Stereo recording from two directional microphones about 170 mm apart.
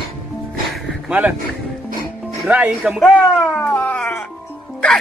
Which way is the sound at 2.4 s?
5° right (ahead or behind).